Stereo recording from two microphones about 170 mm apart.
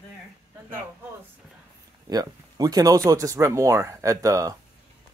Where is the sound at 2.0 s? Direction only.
20° right (ahead or behind).